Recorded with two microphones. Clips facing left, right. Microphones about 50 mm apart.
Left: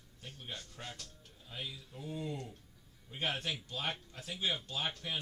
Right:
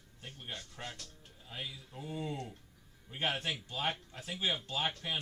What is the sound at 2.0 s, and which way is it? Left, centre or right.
Speech, centre.